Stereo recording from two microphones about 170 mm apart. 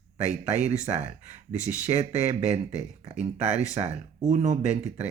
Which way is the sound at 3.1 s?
40° right (ahead or behind).